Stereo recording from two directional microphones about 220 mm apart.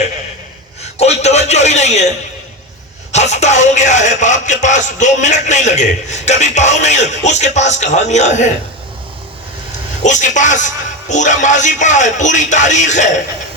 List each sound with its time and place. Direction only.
0.9 s a sound: 30° left (ahead or behind)
3.1 s speech: 30° left (ahead or behind)
10.0 s speech: 35° left (ahead or behind)